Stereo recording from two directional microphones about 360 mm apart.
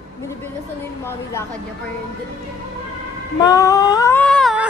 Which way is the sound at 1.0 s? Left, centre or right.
Centre.